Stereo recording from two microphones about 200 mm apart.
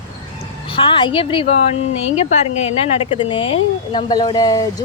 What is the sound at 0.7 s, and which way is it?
A woman's voice, 25° left (ahead or behind).